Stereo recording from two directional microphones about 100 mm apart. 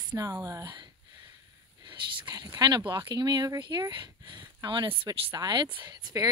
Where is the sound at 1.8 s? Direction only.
50° right (ahead or behind).